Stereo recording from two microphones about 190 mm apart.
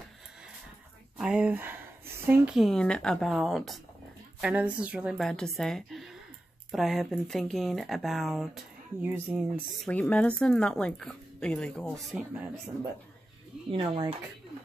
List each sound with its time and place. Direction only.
1.1 s speech: 5° right (ahead or behind)
13.7 s speech: 25° right (ahead or behind)